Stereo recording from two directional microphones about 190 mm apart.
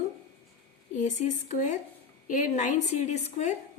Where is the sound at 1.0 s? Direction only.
40° left (ahead or behind).